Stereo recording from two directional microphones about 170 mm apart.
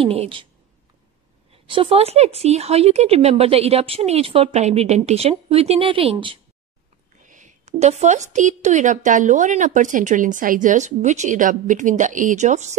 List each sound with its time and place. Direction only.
0.0 s speech: 35° right (ahead or behind)
1.7 s speech: 30° right (ahead or behind)
7.2 s a woman's voice: 45° right (ahead or behind)